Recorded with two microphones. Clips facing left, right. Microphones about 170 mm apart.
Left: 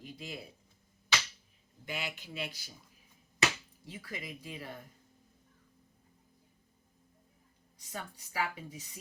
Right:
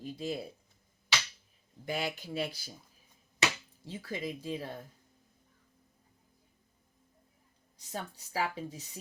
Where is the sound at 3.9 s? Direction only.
30° right (ahead or behind).